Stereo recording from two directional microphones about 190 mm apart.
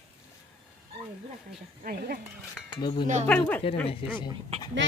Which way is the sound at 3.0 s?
40° right (ahead or behind).